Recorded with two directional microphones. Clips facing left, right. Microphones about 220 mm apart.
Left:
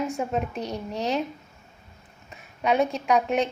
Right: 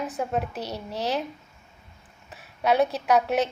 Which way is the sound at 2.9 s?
5° right (ahead or behind).